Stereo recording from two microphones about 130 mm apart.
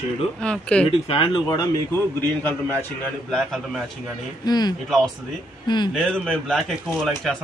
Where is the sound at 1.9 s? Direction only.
15° left (ahead or behind).